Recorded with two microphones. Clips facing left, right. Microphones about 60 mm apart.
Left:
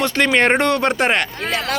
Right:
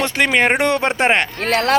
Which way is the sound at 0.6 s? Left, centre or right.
Right.